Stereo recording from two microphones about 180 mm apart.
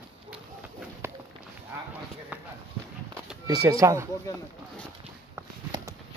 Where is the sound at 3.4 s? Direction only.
20° right (ahead or behind).